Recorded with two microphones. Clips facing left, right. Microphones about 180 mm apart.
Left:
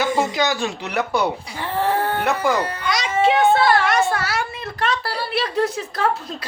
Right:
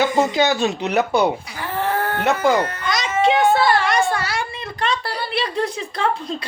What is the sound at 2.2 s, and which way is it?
Speech, 25° right (ahead or behind).